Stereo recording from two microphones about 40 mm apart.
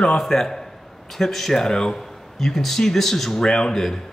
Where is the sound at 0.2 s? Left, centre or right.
Centre.